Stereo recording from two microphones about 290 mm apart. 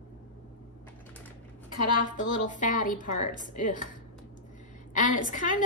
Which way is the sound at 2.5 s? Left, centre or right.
Left.